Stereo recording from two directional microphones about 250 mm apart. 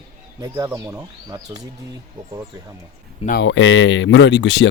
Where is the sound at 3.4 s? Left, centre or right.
Left.